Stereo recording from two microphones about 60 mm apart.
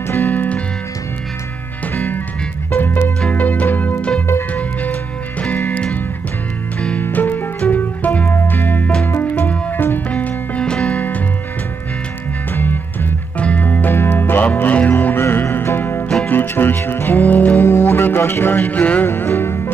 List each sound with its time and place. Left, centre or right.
0.1 s music: left
2.0 s music: left
5.7 s music: centre
7.0 s music: left
8.3 s music: left; by 11.0 s centre
11.0 s music: left
13.4 s music: left
17.4 s music: left
17.6 s music: left
19.0 s music: left